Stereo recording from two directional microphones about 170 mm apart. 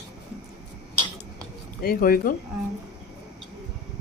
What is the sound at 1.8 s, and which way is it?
Speech, 60° left (ahead or behind).